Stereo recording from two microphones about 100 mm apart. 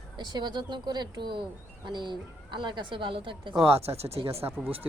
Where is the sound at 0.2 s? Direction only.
45° right (ahead or behind).